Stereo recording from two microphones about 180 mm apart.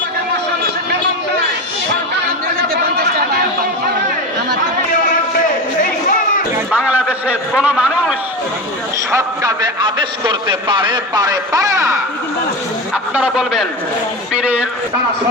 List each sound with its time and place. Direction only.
3.0 s chatter: 60° right (ahead or behind)
6.7 s a sound: 5° right (ahead or behind)
9.1 s a man's voice: 20° right (ahead or behind)
12.9 s a man's voice: 5° right (ahead or behind)